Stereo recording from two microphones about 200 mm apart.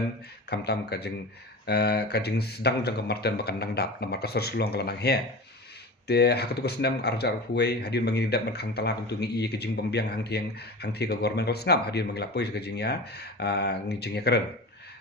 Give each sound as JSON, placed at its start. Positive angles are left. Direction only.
{"t": 0.5, "sound": "speech", "side_deg": 55}